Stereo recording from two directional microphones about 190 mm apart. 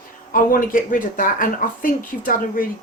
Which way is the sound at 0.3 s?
45° left (ahead or behind).